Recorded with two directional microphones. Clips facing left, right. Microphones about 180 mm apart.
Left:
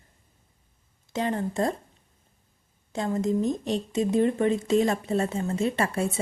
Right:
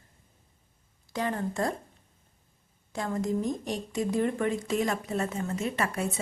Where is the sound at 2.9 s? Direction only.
20° left (ahead or behind).